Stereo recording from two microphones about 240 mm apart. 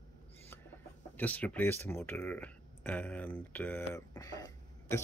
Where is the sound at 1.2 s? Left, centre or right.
Centre.